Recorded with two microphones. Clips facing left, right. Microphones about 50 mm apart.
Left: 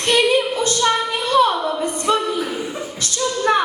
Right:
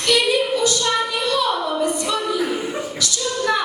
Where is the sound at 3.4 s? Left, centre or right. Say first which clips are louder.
Left 3 dB; left.